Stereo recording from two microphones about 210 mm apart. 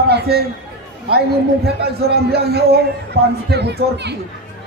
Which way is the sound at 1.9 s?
50° right (ahead or behind).